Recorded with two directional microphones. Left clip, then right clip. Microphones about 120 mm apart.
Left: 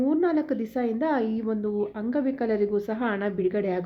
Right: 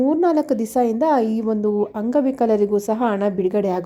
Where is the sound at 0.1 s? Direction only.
55° right (ahead or behind).